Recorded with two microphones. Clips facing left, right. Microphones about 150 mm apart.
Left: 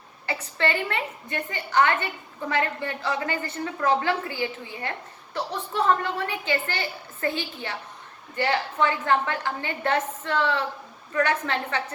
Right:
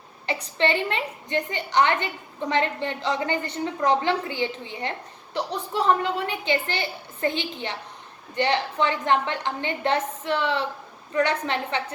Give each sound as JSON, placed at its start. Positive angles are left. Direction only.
{"t": 0.3, "sound": "a woman's voice", "side_deg": -20}